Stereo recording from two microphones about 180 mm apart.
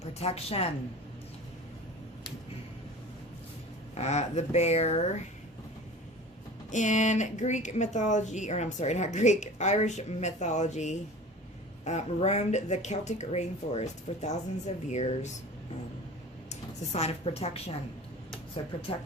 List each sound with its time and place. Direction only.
0.0 s speech: 35° left (ahead or behind)
3.9 s speech: 35° left (ahead or behind)
6.7 s speech: 40° left (ahead or behind)
16.5 s speech: 35° left (ahead or behind)